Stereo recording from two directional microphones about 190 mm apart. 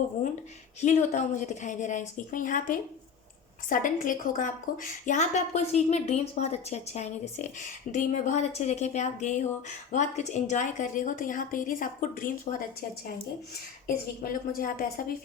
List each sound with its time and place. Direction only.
0.8 s a woman's voice: 40° left (ahead or behind)
13.8 s a woman's voice: 50° left (ahead or behind)